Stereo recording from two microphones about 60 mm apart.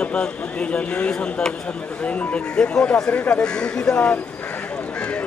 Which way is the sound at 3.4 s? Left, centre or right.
Centre.